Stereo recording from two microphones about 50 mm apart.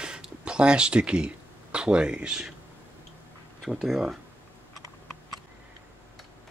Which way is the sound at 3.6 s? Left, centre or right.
Centre.